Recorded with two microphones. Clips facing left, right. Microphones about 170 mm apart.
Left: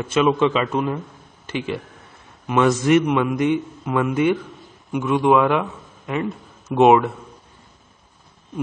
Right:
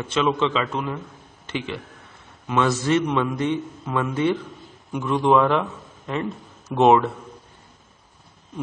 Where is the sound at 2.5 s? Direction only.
10° left (ahead or behind).